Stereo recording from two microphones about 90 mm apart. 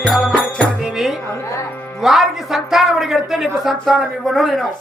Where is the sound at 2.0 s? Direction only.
Centre (ahead or behind).